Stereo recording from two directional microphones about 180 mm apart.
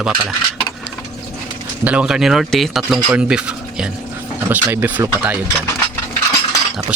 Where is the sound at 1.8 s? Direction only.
5° right (ahead or behind).